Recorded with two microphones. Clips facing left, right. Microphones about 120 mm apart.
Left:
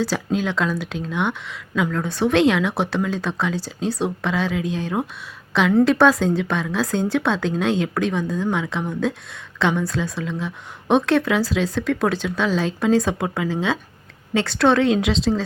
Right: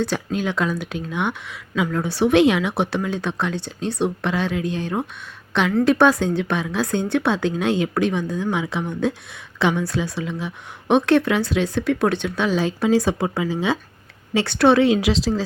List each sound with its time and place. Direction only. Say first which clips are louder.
0.0 s a woman's voice: left 1 dB; centre (ahead or behind)